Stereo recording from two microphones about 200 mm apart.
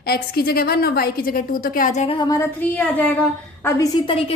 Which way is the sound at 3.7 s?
20° left (ahead or behind).